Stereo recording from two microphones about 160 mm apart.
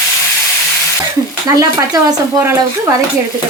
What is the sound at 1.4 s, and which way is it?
Speech, 20° right (ahead or behind).